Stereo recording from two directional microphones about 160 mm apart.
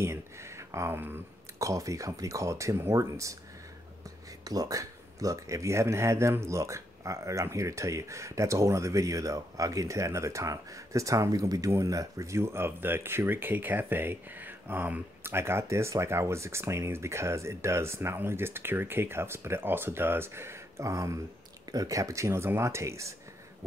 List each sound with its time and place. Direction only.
0.0 s speech: 15° right (ahead or behind)
4.5 s speech: 20° right (ahead or behind)